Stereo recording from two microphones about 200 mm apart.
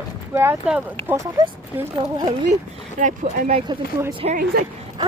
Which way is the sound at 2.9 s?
40° right (ahead or behind).